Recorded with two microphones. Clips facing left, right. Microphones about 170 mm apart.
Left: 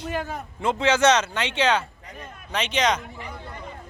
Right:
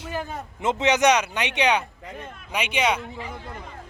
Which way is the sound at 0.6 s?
20° right (ahead or behind).